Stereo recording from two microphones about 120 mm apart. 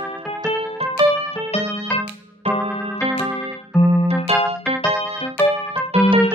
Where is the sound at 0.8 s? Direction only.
60° right (ahead or behind).